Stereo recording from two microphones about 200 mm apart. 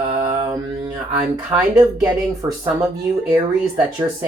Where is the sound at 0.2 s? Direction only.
15° right (ahead or behind).